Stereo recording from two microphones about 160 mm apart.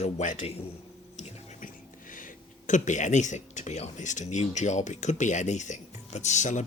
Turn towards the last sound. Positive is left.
turn(degrees=50)  # may be behind; listen again after turning